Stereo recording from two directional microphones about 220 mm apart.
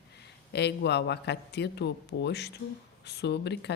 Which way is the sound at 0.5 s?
50° left (ahead or behind).